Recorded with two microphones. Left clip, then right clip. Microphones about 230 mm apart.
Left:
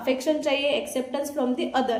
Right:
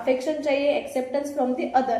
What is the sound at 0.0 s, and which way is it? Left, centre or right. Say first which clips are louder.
A woman's voice: right 1 dB; left.